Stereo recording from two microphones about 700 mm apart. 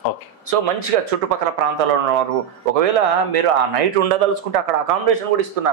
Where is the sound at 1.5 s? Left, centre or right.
Right.